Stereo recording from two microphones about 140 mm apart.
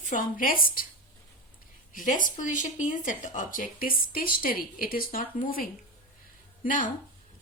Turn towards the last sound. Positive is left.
turn(degrees=75)  # may be behind; listen again after turning